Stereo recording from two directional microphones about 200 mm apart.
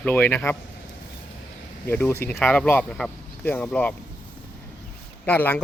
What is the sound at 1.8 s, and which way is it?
Speech, 10° left (ahead or behind).